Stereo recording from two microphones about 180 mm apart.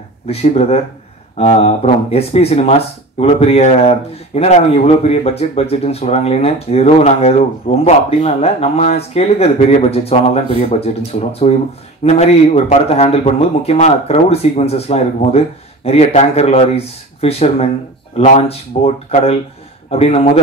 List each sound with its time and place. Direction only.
0.3 s speech: 35° left (ahead or behind)